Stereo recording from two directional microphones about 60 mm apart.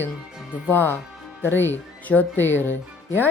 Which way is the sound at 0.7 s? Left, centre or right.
Left.